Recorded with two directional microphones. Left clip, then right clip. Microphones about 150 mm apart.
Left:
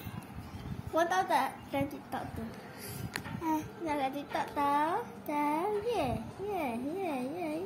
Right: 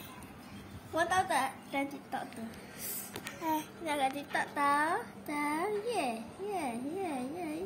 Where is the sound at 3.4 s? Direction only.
40° right (ahead or behind).